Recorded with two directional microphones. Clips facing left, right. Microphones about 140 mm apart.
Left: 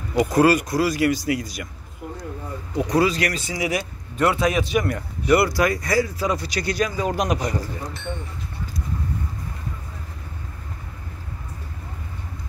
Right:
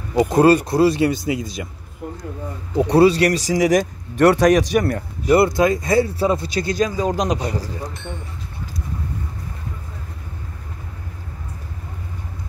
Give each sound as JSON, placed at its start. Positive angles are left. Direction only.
{"t": 0.1, "sound": "speech", "side_deg": -25}
{"t": 2.7, "sound": "speech", "side_deg": -30}